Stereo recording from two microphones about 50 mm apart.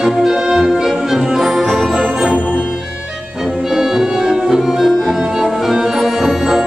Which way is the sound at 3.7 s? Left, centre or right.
Centre.